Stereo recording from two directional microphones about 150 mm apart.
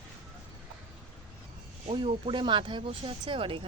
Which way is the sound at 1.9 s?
40° right (ahead or behind).